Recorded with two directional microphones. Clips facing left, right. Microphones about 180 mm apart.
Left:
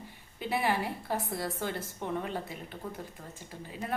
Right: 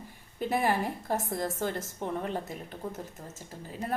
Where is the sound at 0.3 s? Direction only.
45° right (ahead or behind).